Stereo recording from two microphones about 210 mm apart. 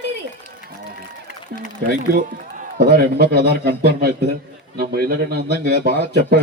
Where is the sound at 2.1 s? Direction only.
50° right (ahead or behind).